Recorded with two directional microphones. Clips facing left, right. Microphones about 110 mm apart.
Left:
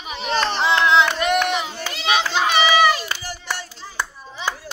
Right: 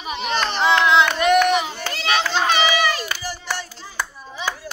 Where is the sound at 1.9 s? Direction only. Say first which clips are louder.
Even; 10° left (ahead or behind).